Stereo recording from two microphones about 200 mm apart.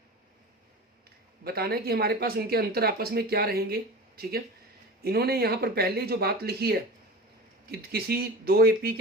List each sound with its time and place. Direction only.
1.5 s speech: 50° right (ahead or behind)